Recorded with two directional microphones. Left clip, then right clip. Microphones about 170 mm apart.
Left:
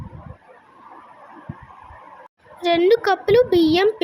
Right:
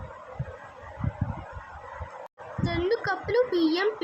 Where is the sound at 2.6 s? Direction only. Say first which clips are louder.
Left 11 dB; 50° left (ahead or behind).